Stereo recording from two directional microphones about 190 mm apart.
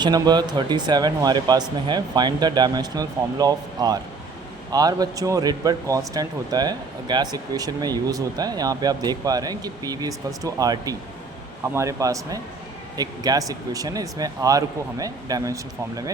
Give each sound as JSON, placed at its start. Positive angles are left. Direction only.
{"t": 0.0, "sound": "speech", "side_deg": -20}